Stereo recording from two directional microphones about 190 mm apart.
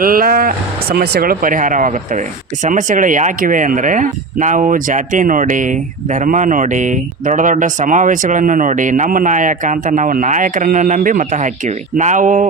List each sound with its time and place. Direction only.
0.0 s speech: 50° right (ahead or behind)